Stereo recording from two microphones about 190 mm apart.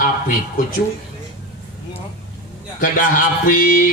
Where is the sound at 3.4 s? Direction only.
45° left (ahead or behind).